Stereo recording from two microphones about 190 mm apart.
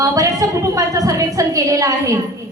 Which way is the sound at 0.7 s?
15° right (ahead or behind).